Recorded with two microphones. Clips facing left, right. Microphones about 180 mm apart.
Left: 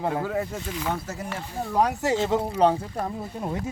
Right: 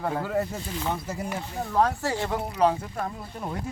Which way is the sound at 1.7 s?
15° left (ahead or behind).